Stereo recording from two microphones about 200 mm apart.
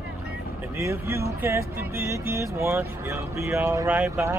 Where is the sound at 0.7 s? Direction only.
15° right (ahead or behind).